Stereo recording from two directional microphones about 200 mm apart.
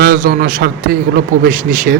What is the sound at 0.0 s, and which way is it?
A man's voice, 45° right (ahead or behind).